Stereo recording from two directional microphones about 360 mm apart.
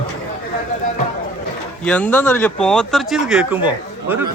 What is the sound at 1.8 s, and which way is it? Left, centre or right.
Speech, centre.